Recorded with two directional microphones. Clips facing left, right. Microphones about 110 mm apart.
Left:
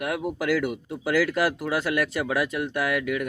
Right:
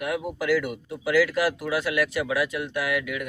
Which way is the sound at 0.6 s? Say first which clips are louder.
Left 1 dB; 40° left (ahead or behind).